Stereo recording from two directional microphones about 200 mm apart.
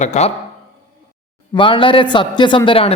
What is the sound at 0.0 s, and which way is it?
Speech, 35° left (ahead or behind).